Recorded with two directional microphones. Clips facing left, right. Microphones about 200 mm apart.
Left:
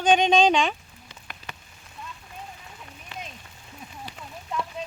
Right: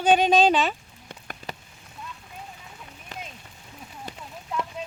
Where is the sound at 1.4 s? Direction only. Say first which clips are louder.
Right 6 dB; 50° right (ahead or behind).